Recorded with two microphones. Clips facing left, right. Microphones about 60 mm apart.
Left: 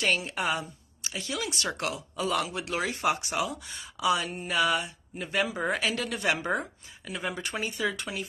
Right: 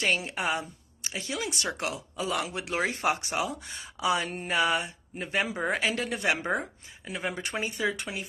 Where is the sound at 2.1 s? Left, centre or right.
Centre.